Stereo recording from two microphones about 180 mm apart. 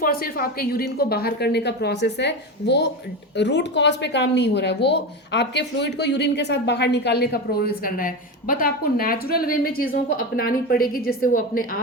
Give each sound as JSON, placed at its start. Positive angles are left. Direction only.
{"t": 0.0, "sound": "a woman's voice", "side_deg": 55}